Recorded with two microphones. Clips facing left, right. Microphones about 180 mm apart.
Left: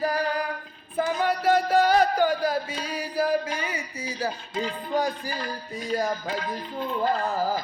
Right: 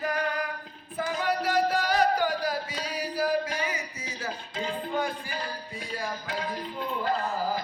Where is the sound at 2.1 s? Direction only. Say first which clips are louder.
Left 4 dB; 50° left (ahead or behind).